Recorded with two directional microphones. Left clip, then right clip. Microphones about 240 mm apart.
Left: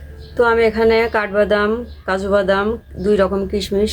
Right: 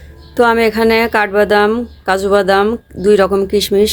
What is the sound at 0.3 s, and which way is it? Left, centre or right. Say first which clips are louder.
A woman's voice: right 3 dB; right.